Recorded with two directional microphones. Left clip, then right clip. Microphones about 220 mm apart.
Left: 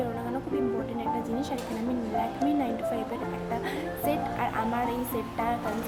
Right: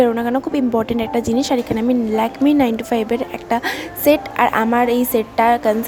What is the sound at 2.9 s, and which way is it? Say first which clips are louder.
A woman's voice: right 13 dB; 45° right (ahead or behind).